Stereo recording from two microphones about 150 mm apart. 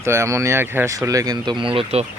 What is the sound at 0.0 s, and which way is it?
Speech, 20° right (ahead or behind).